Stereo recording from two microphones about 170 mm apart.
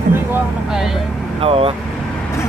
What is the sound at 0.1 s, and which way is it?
Vehicle, 10° right (ahead or behind).